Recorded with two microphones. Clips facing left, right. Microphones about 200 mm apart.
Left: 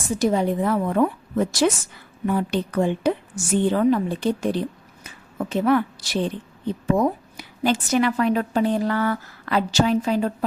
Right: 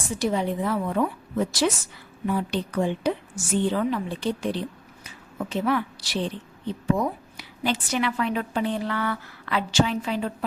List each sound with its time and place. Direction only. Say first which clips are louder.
0.2 s a woman's voice: left 4 dB; 45° left (ahead or behind)